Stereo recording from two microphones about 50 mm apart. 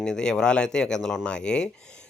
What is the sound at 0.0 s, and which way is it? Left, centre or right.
Speech, centre.